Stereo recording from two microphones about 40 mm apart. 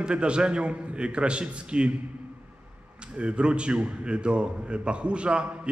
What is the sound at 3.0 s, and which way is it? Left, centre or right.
A man's voice, right.